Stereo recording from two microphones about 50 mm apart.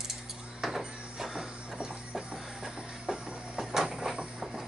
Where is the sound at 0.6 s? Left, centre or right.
Centre.